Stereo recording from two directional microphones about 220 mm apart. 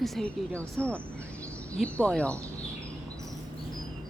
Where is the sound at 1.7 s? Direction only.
5° left (ahead or behind).